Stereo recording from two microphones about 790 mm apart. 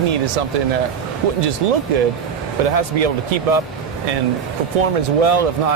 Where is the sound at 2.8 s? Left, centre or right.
Right.